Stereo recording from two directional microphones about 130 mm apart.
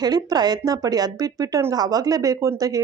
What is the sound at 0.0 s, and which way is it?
Speech, 30° right (ahead or behind).